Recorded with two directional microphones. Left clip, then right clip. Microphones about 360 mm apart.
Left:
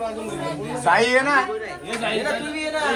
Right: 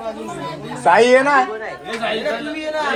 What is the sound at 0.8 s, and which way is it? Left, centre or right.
Speech, centre.